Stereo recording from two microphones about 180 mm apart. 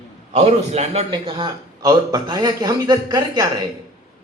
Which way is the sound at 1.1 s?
25° right (ahead or behind).